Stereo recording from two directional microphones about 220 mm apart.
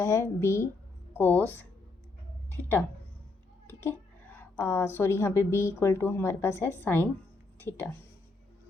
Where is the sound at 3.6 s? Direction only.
10° left (ahead or behind).